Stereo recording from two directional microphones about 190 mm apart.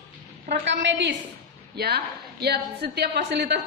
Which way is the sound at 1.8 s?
55° right (ahead or behind).